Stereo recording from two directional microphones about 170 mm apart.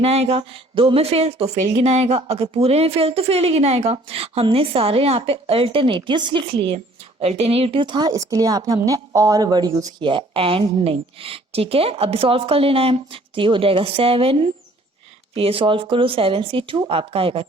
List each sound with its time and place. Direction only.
0.0 s a woman's voice: 35° right (ahead or behind)